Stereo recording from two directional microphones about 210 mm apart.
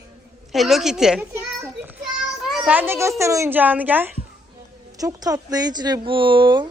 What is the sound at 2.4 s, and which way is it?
A child's voice, 5° right (ahead or behind).